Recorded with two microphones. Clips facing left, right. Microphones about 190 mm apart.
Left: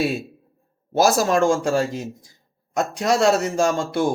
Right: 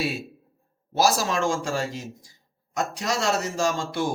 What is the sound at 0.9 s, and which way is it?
A man's voice, 50° left (ahead or behind).